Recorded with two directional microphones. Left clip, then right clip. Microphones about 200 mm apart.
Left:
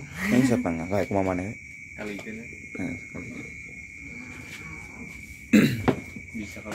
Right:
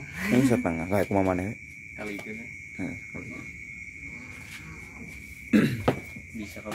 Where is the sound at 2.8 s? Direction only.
5° left (ahead or behind).